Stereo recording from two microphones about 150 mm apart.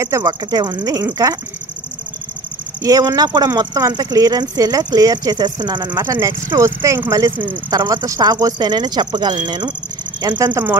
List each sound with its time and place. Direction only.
0.0 s speech: 20° right (ahead or behind)
2.8 s speech: 25° right (ahead or behind)